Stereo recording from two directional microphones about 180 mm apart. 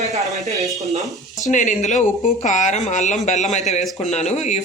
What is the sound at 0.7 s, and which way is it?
Speech, centre (ahead or behind).